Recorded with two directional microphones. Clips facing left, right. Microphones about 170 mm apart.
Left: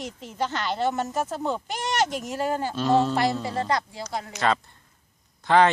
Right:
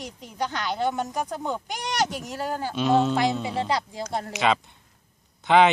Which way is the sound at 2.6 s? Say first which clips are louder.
Right 1 dB; 20° right (ahead or behind).